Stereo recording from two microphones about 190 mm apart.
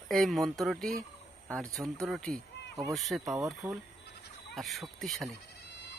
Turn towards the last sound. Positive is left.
turn(degrees=0)  # may be behind; listen again after turning